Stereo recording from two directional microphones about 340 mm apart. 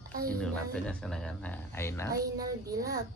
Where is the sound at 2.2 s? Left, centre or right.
Right.